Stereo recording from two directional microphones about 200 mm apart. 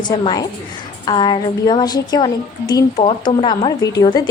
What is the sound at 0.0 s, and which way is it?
A woman's voice, 20° left (ahead or behind).